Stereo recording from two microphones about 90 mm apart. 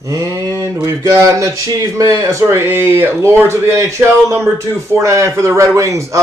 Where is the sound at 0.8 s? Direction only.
35° right (ahead or behind).